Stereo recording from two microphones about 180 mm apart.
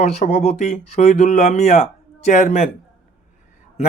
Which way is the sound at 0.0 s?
40° left (ahead or behind).